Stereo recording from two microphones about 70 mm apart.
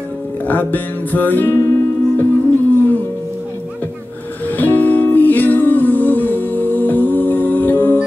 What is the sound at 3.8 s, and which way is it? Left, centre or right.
Music, left.